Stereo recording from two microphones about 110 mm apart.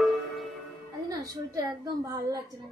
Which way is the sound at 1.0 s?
30° right (ahead or behind).